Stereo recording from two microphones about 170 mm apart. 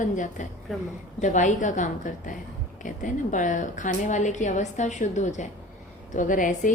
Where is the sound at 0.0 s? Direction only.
45° left (ahead or behind).